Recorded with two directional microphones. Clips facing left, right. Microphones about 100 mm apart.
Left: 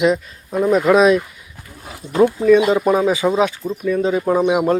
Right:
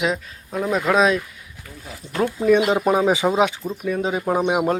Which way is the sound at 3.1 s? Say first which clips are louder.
Left 2 dB; 20° right (ahead or behind).